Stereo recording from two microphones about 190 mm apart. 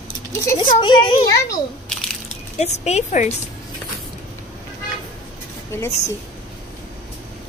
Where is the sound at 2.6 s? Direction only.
35° left (ahead or behind).